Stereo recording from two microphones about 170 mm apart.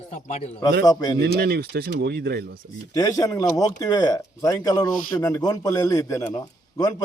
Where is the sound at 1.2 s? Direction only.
70° right (ahead or behind).